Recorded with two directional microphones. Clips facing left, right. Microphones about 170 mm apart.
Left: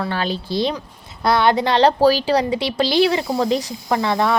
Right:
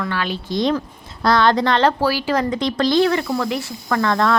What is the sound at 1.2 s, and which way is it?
Speech, 5° left (ahead or behind).